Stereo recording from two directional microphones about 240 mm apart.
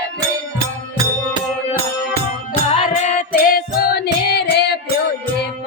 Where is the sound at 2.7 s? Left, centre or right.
Left.